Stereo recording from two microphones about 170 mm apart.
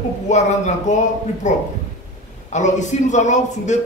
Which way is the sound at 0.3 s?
45° left (ahead or behind).